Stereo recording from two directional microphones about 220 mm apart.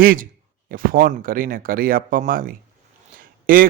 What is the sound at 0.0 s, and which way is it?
Speech, 40° right (ahead or behind).